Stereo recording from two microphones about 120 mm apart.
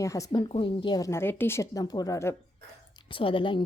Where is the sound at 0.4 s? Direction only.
45° left (ahead or behind); by 1.8 s 20° left (ahead or behind).